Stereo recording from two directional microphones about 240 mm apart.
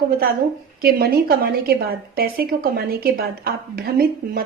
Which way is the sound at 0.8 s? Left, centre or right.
Right.